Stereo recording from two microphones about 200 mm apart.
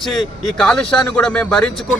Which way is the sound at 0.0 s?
Centre (ahead or behind).